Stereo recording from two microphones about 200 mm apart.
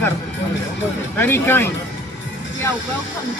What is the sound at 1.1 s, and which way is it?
Speech, 10° left (ahead or behind).